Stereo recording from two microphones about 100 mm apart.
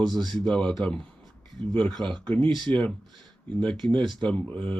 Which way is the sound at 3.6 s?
10° left (ahead or behind).